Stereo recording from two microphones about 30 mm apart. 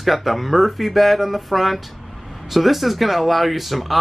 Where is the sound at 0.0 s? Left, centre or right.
Centre.